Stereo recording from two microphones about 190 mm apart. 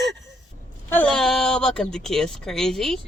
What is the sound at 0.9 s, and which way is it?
Speech, 10° left (ahead or behind).